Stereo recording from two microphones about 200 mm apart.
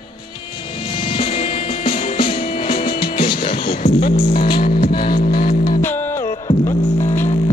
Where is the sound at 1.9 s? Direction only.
40° left (ahead or behind).